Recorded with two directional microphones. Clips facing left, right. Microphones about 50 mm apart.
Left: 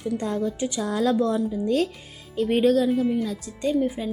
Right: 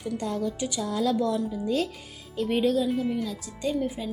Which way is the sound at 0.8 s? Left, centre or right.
Left.